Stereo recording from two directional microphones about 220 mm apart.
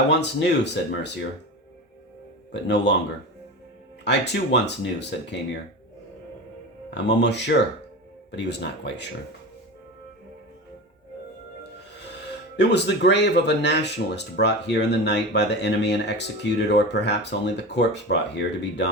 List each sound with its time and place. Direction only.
0.1 s speech: 50° left (ahead or behind)
2.5 s speech: 50° left (ahead or behind)
4.0 s speech: 50° left (ahead or behind)
6.9 s speech: 50° left (ahead or behind)
12.5 s speech: 50° left (ahead or behind)